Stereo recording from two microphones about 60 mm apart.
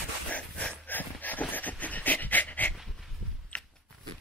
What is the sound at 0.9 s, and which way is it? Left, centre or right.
Pant, left.